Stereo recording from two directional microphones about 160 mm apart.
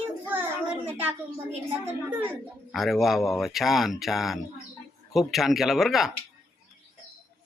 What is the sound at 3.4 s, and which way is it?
Speech, centre (ahead or behind).